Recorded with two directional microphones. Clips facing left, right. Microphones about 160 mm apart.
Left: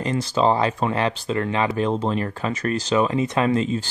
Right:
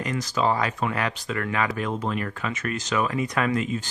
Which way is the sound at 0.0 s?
30° left (ahead or behind).